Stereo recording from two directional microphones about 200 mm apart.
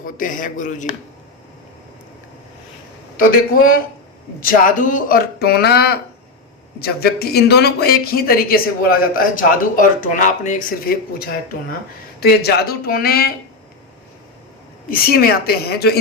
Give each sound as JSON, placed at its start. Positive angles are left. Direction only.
{"t": 0.0, "sound": "a man's voice", "side_deg": 40}
{"t": 3.2, "sound": "speech", "side_deg": 45}
{"t": 14.8, "sound": "speech", "side_deg": 50}